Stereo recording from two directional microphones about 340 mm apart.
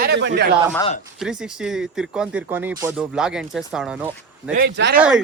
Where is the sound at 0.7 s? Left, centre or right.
Centre.